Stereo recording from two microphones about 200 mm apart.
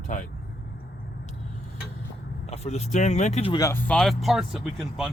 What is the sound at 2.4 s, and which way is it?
Speech, 35° left (ahead or behind).